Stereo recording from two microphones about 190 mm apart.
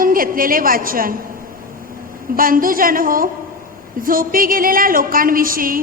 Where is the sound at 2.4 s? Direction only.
50° right (ahead or behind).